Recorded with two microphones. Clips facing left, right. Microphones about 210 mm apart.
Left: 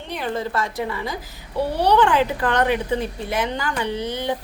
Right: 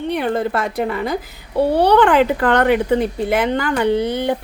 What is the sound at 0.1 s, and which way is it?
A woman's voice, 60° right (ahead or behind).